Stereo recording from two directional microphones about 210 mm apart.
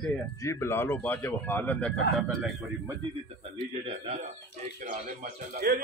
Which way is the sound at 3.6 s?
30° right (ahead or behind).